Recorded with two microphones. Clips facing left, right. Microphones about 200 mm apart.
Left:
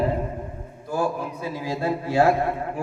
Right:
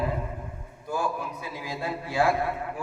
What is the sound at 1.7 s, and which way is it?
Speech, 40° left (ahead or behind).